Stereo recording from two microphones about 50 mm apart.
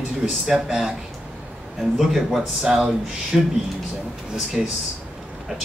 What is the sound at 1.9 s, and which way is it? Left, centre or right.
Speech, centre.